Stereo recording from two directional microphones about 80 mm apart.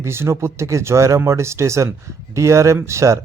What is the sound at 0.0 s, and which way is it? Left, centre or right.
Speech, right.